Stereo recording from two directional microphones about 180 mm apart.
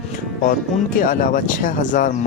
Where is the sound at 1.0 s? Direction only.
50° left (ahead or behind).